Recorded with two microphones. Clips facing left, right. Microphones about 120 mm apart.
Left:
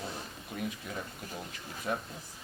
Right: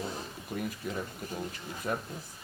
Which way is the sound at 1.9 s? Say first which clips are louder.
Right 1 dB; 5° right (ahead or behind).